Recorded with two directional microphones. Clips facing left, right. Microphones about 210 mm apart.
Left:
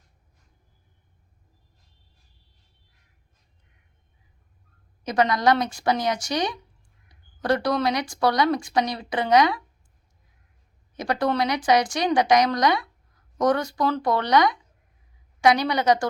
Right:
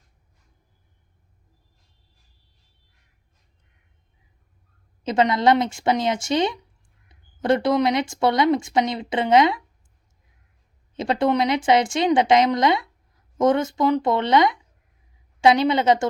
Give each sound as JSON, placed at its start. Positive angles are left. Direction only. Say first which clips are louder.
{"t": 5.0, "sound": "a woman's voice", "louder": "right 2 dB", "side_deg": -25}
{"t": 10.9, "sound": "a woman's voice", "louder": "right 3 dB", "side_deg": -25}